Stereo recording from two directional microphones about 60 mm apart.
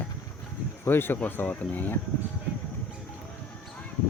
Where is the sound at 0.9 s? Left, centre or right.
Left.